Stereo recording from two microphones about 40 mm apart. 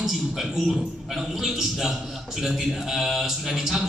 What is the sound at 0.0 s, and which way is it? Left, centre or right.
A man's voice, centre.